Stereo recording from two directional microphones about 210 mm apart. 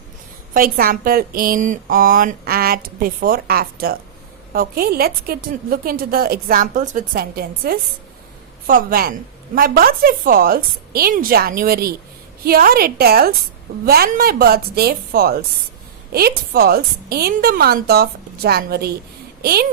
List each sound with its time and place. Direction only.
0.5 s a woman's voice: 45° right (ahead or behind)
16.5 s a woman's voice: 45° right (ahead or behind)